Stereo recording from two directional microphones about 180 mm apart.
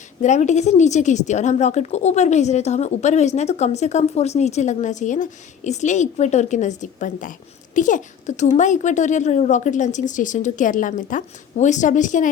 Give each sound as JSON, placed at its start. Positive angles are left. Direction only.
{"t": 0.2, "sound": "a woman's voice", "side_deg": 40}